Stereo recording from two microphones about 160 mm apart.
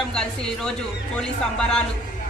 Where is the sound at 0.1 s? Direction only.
5° left (ahead or behind).